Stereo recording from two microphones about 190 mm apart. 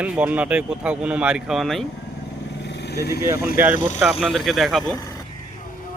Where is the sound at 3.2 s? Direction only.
15° right (ahead or behind).